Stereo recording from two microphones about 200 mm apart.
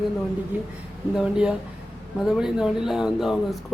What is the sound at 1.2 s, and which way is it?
Speech, 5° right (ahead or behind).